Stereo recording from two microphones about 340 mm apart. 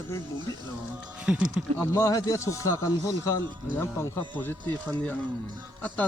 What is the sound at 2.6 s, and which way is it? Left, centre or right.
Speech, left.